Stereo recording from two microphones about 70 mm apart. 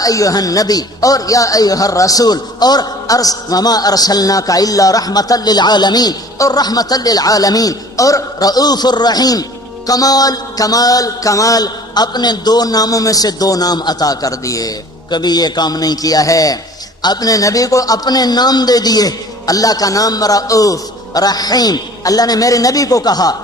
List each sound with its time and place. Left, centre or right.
0.0 s speech: left
17.0 s speech: left